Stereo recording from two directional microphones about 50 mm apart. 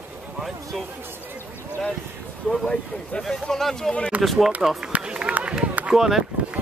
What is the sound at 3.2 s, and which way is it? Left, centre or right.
Speech, centre.